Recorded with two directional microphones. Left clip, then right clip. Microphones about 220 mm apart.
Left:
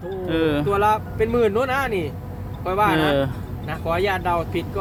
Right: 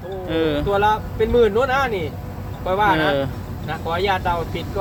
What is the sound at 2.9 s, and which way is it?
Speech, 15° left (ahead or behind).